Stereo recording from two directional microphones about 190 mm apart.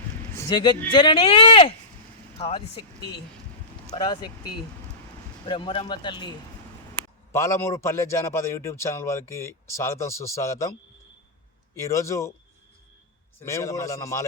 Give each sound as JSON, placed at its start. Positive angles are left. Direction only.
{"t": 0.3, "sound": "speech", "side_deg": 20}
{"t": 3.9, "sound": "speech", "side_deg": 20}
{"t": 5.5, "sound": "speech", "side_deg": 25}
{"t": 7.3, "sound": "a man's voice", "side_deg": 15}
{"t": 13.4, "sound": "a man's voice", "side_deg": 15}